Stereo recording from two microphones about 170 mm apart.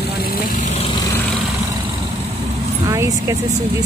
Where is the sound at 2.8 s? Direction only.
20° right (ahead or behind).